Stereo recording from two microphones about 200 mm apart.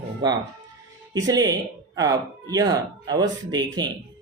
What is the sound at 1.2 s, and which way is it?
Speech, 20° right (ahead or behind).